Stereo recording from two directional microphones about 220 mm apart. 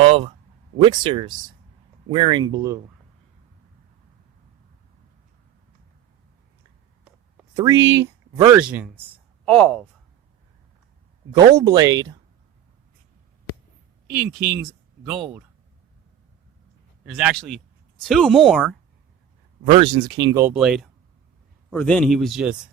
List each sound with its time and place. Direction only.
0.0 s a sound: 25° right (ahead or behind)
0.8 s speech: 20° right (ahead or behind)
7.5 s a man's voice: 15° right (ahead or behind); by 9.8 s 5° left (ahead or behind)
11.5 s speech: 15° right (ahead or behind)
15.0 s speech: 5° right (ahead or behind)
17.1 s a man's voice: centre (ahead or behind)
19.6 s a man's voice: 25° right (ahead or behind); by 22.5 s centre (ahead or behind)